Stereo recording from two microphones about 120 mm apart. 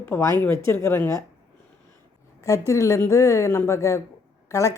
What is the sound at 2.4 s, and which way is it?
Speech, 25° left (ahead or behind).